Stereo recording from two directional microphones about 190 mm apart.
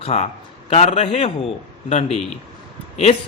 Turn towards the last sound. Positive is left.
turn(degrees=35)  # may be behind; listen again after turning